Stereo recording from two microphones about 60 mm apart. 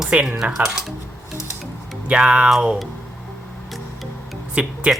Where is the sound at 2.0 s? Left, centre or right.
Centre.